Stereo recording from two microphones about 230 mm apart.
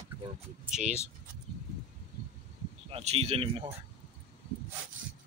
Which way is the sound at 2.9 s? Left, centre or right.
Right.